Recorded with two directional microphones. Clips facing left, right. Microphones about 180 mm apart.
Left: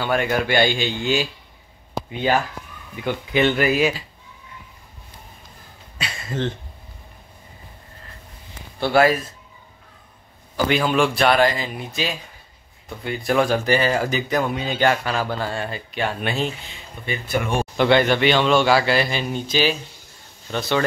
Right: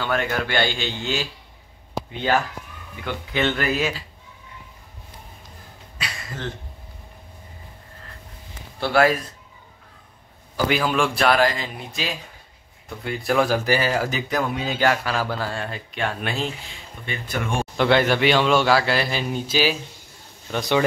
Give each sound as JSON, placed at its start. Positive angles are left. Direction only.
{"t": 0.0, "sound": "speech", "side_deg": 15}
{"t": 3.0, "sound": "speech", "side_deg": 15}
{"t": 5.9, "sound": "a sound", "side_deg": 25}
{"t": 8.7, "sound": "speech", "side_deg": 0}
{"t": 10.7, "sound": "speech", "side_deg": 0}